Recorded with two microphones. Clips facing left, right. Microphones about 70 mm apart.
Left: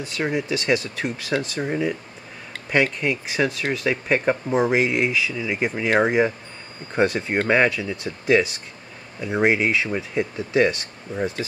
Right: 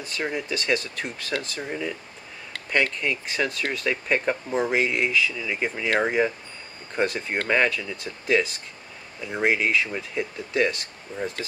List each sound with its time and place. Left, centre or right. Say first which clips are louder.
0.0 s speech: left 4 dB; centre